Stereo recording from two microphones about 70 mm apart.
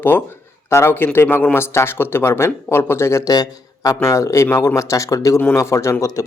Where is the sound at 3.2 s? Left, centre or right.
Left.